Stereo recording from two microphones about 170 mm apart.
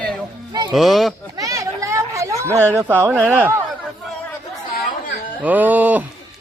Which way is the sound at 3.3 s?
10° right (ahead or behind).